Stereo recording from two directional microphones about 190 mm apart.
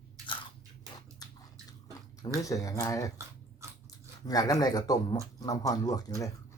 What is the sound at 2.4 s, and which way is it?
Speech, 15° left (ahead or behind).